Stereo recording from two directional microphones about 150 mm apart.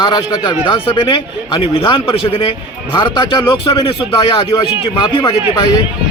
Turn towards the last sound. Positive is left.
turn(degrees=30)  # may be behind; listen again after turning